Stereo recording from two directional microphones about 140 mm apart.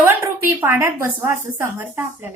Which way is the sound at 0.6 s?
20° right (ahead or behind).